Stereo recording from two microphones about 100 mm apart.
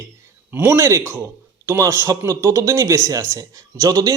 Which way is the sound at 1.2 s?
20° right (ahead or behind).